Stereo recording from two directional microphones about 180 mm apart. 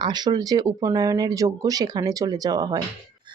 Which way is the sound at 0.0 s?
25° right (ahead or behind).